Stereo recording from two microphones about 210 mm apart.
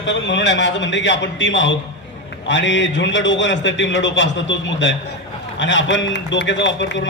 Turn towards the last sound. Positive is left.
turn(degrees=60)  # may be behind; listen again after turning